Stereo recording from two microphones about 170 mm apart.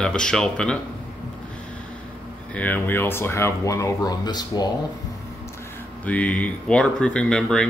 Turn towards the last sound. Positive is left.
turn(degrees=5)  # may be behind; listen again after turning